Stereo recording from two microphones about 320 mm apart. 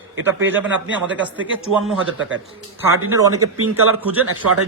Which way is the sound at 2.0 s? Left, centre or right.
Right.